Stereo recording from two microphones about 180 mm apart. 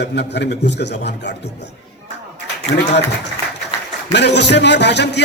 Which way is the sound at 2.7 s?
80° left.